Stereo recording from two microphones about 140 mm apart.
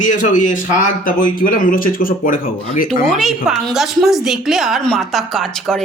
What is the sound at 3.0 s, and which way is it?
A woman's voice, centre (ahead or behind).